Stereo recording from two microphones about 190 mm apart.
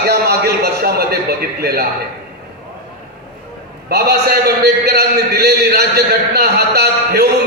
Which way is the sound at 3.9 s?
55° right (ahead or behind).